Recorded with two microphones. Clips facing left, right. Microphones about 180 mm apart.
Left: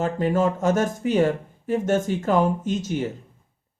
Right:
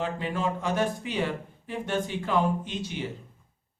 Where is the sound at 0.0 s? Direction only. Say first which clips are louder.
Left 8 dB; 45° left (ahead or behind).